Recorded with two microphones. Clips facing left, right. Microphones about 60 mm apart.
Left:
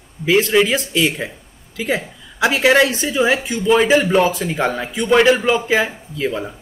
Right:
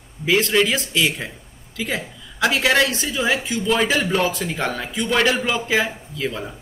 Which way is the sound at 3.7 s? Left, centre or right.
Centre.